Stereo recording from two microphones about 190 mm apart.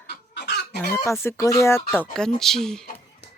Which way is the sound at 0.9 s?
15° left (ahead or behind).